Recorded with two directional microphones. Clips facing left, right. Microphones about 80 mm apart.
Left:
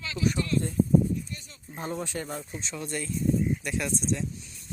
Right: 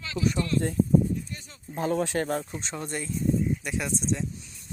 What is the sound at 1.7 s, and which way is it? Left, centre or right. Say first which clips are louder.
Speech: right 7 dB; right.